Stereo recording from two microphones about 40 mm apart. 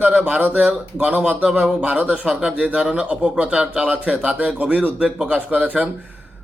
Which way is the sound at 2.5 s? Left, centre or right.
Right.